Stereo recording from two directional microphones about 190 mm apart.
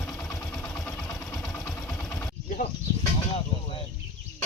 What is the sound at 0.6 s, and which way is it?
Vehicle, 15° left (ahead or behind).